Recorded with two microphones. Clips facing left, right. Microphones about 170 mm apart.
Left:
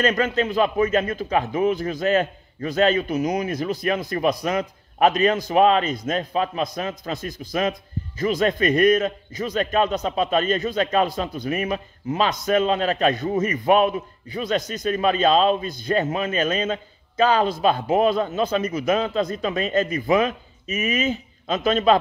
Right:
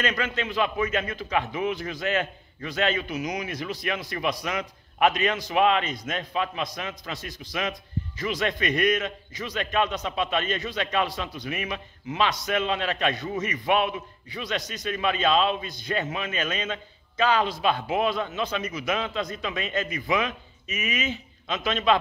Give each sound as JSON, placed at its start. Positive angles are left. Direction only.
{"t": 0.0, "sound": "a man's voice", "side_deg": 40}